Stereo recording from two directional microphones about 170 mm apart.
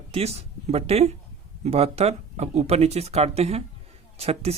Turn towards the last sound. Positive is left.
turn(degrees=-35)  # may be behind; listen again after turning